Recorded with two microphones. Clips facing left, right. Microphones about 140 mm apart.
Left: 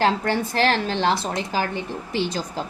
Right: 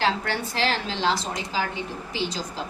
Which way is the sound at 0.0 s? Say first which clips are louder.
Left 4 dB; 50° left (ahead or behind).